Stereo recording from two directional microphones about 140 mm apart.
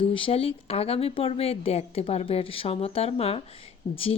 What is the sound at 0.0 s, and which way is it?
Speech, 40° left (ahead or behind).